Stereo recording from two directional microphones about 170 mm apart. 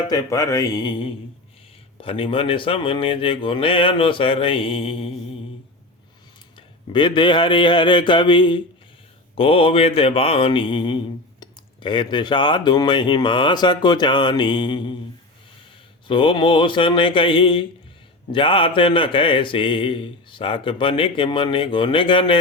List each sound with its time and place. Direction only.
0.1 s mantra: 20° left (ahead or behind)
2.0 s speech: 30° left (ahead or behind)
6.6 s mantra: 30° left (ahead or behind)
16.0 s mantra: 30° left (ahead or behind)